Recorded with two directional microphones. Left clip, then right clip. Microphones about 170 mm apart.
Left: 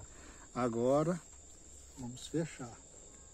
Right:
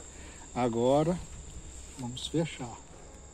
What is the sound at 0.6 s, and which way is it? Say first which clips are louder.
Speech: right 5 dB; 50° left (ahead or behind).